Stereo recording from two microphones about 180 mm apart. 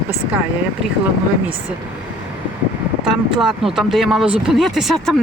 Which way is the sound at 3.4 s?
Centre (ahead or behind).